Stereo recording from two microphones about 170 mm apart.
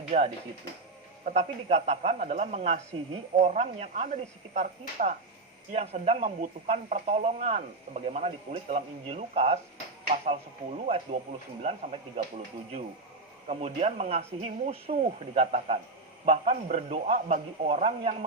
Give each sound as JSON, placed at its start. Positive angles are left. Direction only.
{"t": 0.1, "sound": "speech", "side_deg": -35}
{"t": 13.5, "sound": "speech", "side_deg": -40}